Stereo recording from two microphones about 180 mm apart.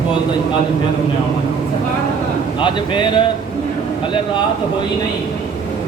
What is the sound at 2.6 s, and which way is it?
Speech, 25° left (ahead or behind).